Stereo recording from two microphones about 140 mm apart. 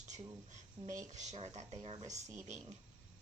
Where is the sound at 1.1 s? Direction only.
50° right (ahead or behind).